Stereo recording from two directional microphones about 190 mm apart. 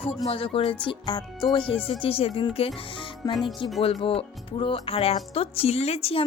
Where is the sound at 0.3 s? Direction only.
30° left (ahead or behind).